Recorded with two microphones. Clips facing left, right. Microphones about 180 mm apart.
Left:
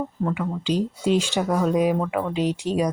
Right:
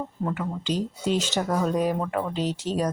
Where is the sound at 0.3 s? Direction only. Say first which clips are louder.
Left 4 dB; 10° left (ahead or behind).